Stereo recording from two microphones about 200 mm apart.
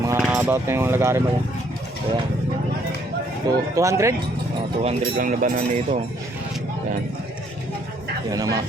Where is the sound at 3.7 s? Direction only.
15° right (ahead or behind).